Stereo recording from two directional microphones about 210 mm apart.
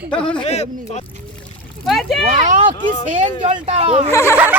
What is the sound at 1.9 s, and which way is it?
Speech, centre (ahead or behind).